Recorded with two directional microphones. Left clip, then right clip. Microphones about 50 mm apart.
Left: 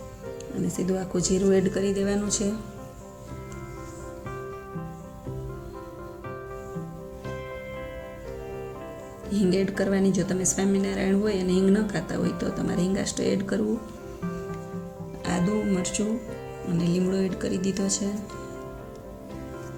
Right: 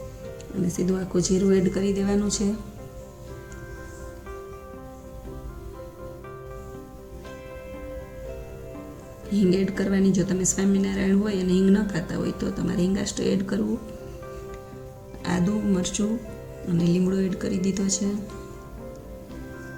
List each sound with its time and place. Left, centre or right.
0.7 s a woman's voice: centre
9.3 s a woman's voice: centre
14.2 s music: centre
16.6 s speech: centre